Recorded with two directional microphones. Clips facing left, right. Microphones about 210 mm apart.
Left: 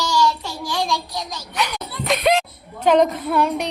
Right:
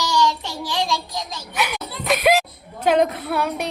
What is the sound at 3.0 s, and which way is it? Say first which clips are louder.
Music: left 3 dB; 5° right (ahead or behind).